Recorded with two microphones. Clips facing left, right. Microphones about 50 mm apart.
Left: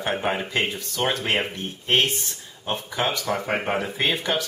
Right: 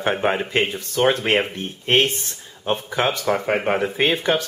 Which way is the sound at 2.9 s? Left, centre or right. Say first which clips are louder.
Right 2 dB; right.